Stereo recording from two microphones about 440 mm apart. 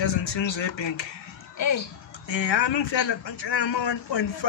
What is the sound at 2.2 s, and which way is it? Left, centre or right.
Speech, left.